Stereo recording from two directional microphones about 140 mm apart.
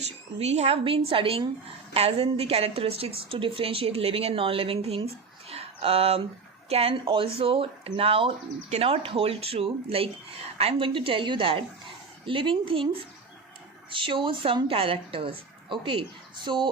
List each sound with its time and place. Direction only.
0.0 s a woman's voice: 50° right (ahead or behind)
5.5 s a sound: 45° right (ahead or behind)
6.7 s a woman's voice: 45° right (ahead or behind)